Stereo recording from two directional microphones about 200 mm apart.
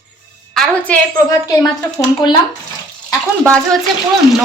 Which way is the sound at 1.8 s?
20° left (ahead or behind).